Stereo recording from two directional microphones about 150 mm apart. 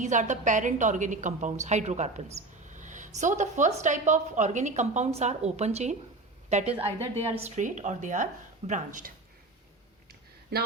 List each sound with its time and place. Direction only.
0.0 s a woman's voice: 55° right (ahead or behind)